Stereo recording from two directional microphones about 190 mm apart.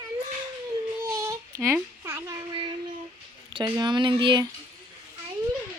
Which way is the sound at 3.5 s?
20° right (ahead or behind).